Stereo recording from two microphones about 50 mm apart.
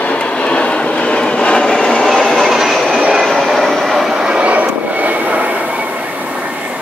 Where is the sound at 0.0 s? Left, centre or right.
Left.